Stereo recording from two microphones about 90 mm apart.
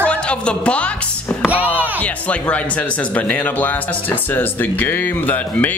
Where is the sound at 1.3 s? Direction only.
15° left (ahead or behind).